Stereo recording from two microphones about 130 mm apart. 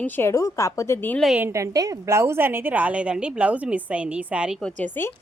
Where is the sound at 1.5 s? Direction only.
25° right (ahead or behind); by 4.5 s 10° right (ahead or behind).